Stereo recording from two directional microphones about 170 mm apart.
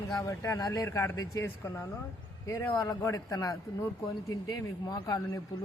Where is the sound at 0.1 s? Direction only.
20° left (ahead or behind).